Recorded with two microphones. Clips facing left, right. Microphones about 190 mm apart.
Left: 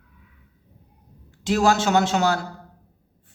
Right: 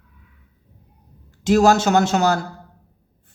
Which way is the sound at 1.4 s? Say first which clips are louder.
Right 5 dB; 45° right (ahead or behind).